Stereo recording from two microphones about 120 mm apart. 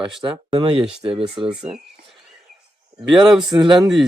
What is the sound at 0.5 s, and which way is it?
Speech, 50° right (ahead or behind).